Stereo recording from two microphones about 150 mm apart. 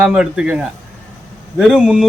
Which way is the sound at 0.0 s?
5° right (ahead or behind).